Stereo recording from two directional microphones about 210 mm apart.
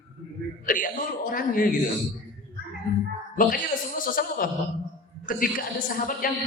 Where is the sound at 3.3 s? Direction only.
40° left (ahead or behind).